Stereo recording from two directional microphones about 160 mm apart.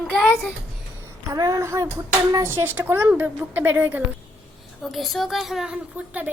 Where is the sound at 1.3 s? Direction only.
20° right (ahead or behind).